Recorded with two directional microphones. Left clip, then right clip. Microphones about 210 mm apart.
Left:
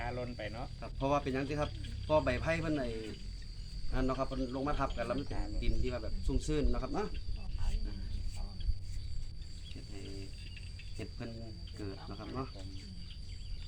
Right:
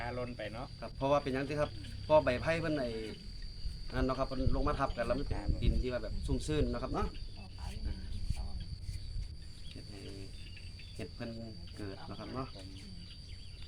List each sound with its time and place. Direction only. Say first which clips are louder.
0.0 s speech: even; 5° left (ahead or behind)
0.8 s speech: right 2 dB; 20° right (ahead or behind)
10.9 s cricket: right 1 dB; 15° right (ahead or behind)
11.8 s speech: even; 15° right (ahead or behind)